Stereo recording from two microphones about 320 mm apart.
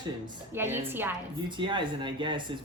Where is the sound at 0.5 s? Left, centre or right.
Centre.